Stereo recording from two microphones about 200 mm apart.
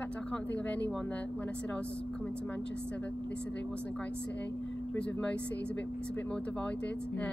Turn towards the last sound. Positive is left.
turn(degrees=5)  # may be behind; listen again after turning